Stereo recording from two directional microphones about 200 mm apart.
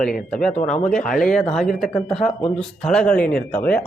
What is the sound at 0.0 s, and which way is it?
Speech, 5° left (ahead or behind).